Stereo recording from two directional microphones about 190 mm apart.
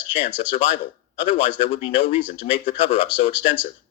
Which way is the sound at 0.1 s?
30° left (ahead or behind).